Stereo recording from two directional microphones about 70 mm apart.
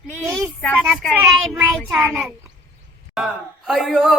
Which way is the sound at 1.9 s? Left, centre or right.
Centre.